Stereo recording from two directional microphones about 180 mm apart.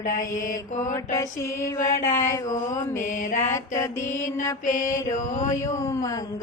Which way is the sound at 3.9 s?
40° left (ahead or behind).